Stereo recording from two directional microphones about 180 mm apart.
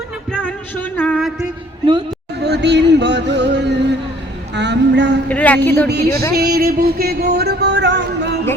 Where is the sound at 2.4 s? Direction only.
70° right (ahead or behind).